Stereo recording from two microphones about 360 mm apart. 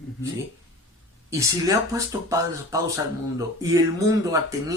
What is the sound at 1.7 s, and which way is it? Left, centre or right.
Speech, centre.